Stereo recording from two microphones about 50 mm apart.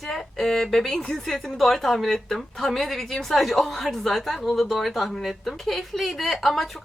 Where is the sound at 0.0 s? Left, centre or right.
Centre.